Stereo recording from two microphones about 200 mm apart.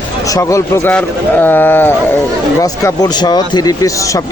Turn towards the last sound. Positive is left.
turn(degrees=20)  # may be behind; listen again after turning